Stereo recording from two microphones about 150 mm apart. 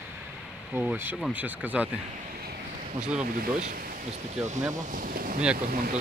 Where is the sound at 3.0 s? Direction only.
5° right (ahead or behind).